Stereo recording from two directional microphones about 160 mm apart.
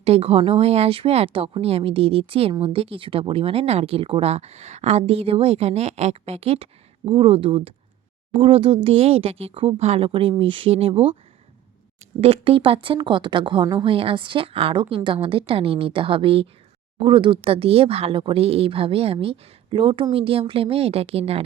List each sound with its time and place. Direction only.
0.0 s speech: 40° right (ahead or behind)
12.2 s speech: 35° right (ahead or behind)